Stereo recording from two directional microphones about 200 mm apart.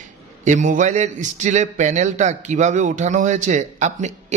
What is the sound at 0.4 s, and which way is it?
A man's voice, 40° right (ahead or behind).